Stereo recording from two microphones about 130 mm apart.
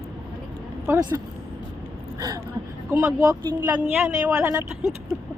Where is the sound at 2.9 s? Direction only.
20° right (ahead or behind).